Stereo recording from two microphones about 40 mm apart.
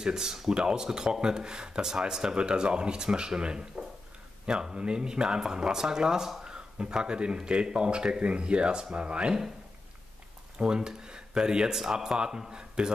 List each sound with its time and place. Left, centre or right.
0.0 s speech: centre
6.5 s speech: right
10.6 s speech: centre